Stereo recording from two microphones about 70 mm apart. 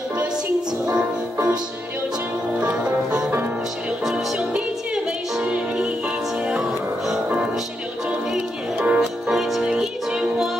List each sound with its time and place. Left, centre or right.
2.6 s music: centre
8.3 s music: centre